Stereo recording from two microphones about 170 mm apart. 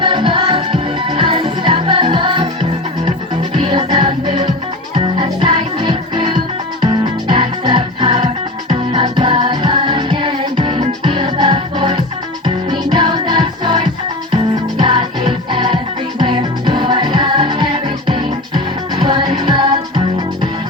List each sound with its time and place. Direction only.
0.0 s music: 30° right (ahead or behind)
3.7 s music: 30° right (ahead or behind)
7.3 s music: 30° right (ahead or behind)